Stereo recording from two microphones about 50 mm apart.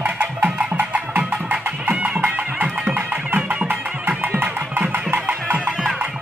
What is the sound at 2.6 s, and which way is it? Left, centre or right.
Music, right.